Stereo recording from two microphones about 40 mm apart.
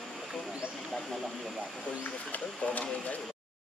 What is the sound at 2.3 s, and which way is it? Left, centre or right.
Speech, left.